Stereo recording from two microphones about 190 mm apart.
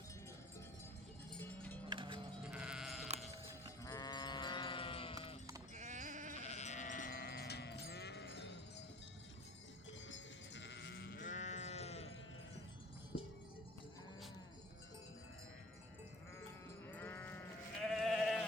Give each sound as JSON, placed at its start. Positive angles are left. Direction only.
{"t": 1.3, "sound": "livestock", "side_deg": 10}
{"t": 1.9, "sound": "music", "side_deg": -25}
{"t": 2.4, "sound": "sheep", "side_deg": -5}
{"t": 3.8, "sound": "sheep", "side_deg": 20}
{"t": 5.7, "sound": "sheep", "side_deg": -40}
{"t": 6.4, "sound": "sheep", "side_deg": 35}
{"t": 10.1, "sound": "sheep", "side_deg": 70}
{"t": 11.2, "sound": "sheep", "side_deg": 40}
{"t": 16.9, "sound": "sheep", "side_deg": 10}